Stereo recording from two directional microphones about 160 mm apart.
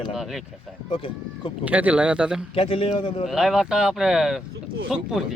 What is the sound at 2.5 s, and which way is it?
Speech, 35° left (ahead or behind).